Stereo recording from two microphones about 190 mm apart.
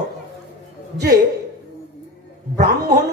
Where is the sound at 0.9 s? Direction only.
60° right (ahead or behind).